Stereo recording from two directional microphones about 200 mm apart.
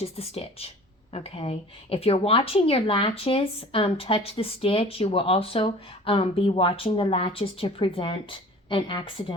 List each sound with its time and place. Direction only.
0.0 s speech: 30° left (ahead or behind)